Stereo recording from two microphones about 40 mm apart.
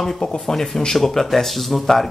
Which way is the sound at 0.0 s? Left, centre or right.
Centre.